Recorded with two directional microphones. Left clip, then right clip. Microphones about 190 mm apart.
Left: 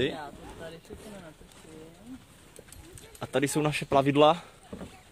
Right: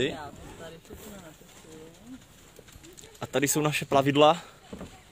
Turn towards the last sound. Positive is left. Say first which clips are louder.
# right 1 dB
turn(degrees=-10)  # may be behind; listen again after turning